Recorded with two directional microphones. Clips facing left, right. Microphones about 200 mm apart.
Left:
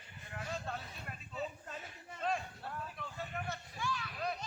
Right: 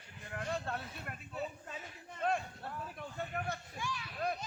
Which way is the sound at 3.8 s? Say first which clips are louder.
Left 2 dB; 15° right (ahead or behind).